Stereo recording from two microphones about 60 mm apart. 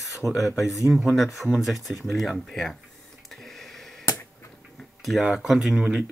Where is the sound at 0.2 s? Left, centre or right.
Centre.